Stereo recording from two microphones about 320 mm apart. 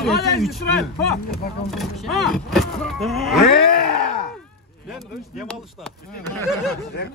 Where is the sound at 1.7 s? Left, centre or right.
Centre.